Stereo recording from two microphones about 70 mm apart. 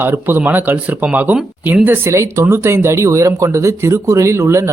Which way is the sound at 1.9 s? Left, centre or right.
Right.